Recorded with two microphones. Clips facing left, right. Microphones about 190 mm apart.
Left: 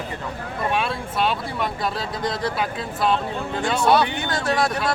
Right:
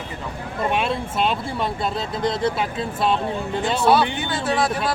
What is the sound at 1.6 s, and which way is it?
Speech, 25° right (ahead or behind).